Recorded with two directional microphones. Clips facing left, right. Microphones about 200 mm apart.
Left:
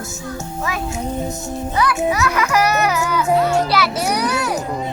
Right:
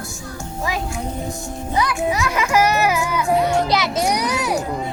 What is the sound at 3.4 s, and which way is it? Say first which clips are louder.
Children playing: left 1 dB; 15° right (ahead or behind).